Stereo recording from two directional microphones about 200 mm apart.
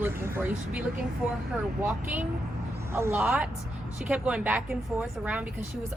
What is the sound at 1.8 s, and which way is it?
A woman's voice, 10° right (ahead or behind).